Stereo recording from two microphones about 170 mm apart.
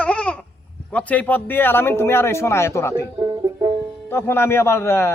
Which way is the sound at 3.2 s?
20° right (ahead or behind).